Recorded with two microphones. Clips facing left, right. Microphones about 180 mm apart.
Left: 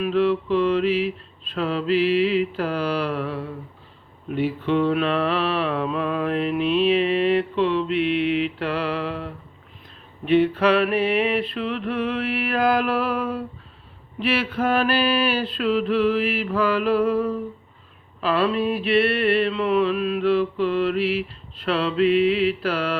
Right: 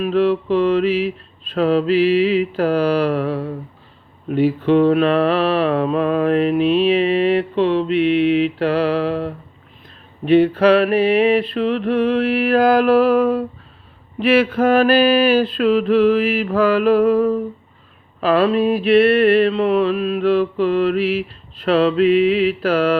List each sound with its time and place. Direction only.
0.0 s mantra: 40° right (ahead or behind)